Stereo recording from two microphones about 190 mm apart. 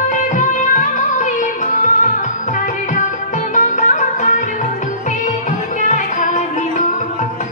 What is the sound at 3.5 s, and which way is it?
Music, 40° left (ahead or behind).